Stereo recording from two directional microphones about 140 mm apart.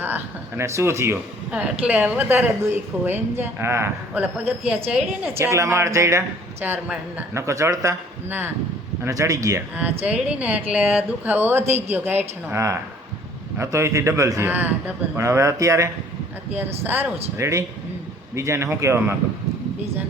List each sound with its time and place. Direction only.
0.0 s speech: 15° right (ahead or behind)
5.4 s a man's voice: 20° right (ahead or behind)
7.3 s a man's voice: 20° right (ahead or behind)
10.0 s speech: 10° right (ahead or behind)
11.6 s a woman's voice: 50° right (ahead or behind)
11.9 s a man's voice: 15° right (ahead or behind)